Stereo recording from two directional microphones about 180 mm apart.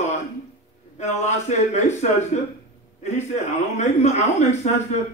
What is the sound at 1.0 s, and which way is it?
Speech, 40° left (ahead or behind).